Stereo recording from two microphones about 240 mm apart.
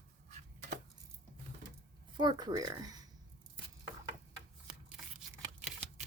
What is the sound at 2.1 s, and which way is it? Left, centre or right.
Speech, centre.